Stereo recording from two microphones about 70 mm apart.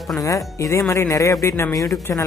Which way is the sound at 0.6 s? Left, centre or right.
Left.